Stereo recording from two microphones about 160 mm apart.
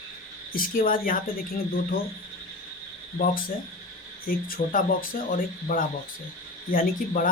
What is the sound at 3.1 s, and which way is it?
Speech, 65° left (ahead or behind).